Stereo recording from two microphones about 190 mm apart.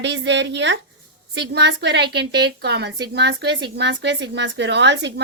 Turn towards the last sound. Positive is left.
turn(degrees=-65)  # may be behind; listen again after turning